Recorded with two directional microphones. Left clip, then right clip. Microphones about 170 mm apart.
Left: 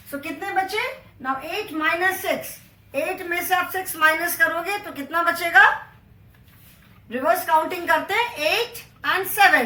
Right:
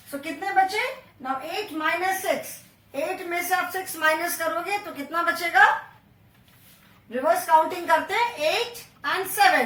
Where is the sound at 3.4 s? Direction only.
15° left (ahead or behind).